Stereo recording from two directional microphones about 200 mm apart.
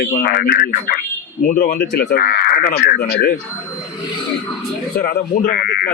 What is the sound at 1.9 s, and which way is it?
Speech, 55° left (ahead or behind).